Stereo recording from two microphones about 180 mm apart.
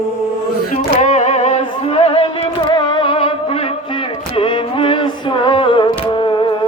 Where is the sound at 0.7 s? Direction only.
40° left (ahead or behind); by 6.4 s 25° left (ahead or behind).